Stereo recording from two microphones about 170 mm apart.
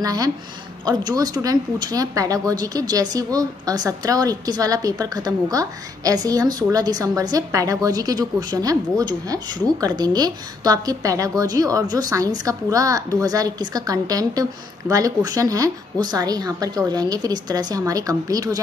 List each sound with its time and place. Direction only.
0.0 s a woman's voice: 20° right (ahead or behind)